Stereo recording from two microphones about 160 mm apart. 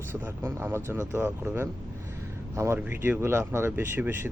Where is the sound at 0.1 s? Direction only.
15° right (ahead or behind).